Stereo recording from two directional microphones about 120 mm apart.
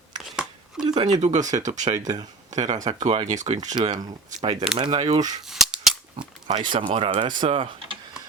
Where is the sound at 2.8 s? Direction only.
65° right (ahead or behind).